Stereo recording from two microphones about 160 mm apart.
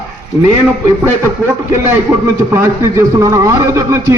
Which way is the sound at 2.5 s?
15° right (ahead or behind).